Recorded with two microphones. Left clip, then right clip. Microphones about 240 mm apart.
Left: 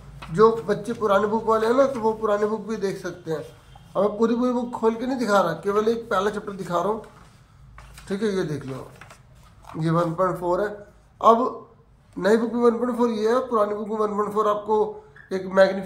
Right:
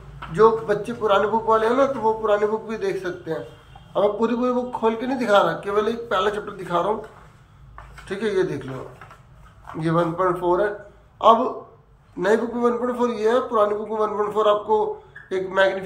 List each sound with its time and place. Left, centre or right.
0.2 s a man's voice: left
8.1 s a man's voice: left